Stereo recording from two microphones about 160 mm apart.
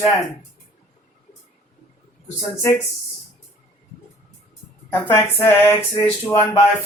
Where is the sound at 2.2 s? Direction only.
20° left (ahead or behind).